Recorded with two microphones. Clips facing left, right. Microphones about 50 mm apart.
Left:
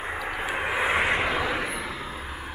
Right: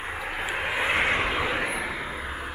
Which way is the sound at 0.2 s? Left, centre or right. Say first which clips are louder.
Even; centre.